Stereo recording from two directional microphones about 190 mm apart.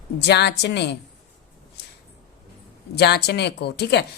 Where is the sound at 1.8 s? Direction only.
60° left (ahead or behind).